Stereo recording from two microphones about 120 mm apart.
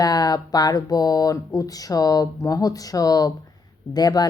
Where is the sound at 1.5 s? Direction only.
30° left (ahead or behind).